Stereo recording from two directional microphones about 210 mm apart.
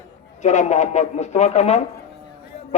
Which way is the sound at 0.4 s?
35° left (ahead or behind).